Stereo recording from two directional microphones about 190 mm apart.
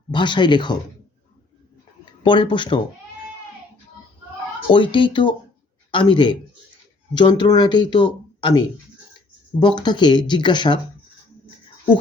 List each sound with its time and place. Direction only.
0.1 s speech: 25° left (ahead or behind)
2.2 s speech: 25° left (ahead or behind)
4.7 s speech: 25° left (ahead or behind)